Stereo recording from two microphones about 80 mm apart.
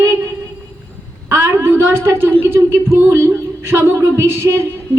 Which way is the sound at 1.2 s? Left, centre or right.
Right.